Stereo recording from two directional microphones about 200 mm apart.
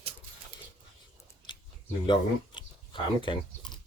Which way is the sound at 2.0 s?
25° left (ahead or behind).